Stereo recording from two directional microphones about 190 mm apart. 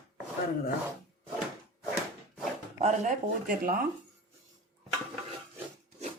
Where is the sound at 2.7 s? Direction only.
40° right (ahead or behind).